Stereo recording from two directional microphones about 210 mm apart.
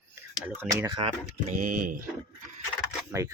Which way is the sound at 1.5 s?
40° right (ahead or behind).